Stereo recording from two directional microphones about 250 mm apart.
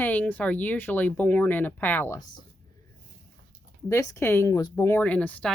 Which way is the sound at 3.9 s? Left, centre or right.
Centre.